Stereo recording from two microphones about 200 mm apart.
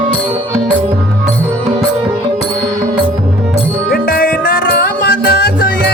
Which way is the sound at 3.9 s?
45° left (ahead or behind).